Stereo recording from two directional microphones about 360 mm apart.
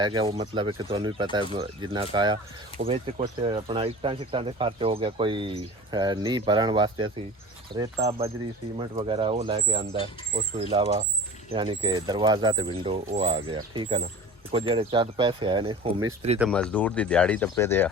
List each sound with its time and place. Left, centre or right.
0.0 s speech: centre
16.4 s speech: centre